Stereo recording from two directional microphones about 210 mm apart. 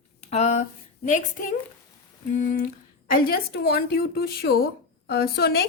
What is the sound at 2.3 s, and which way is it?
A woman's voice, 40° left (ahead or behind).